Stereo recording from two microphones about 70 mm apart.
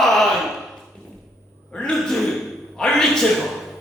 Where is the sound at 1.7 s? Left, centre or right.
Centre.